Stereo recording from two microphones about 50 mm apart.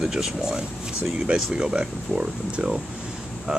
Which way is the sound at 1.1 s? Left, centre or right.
Centre.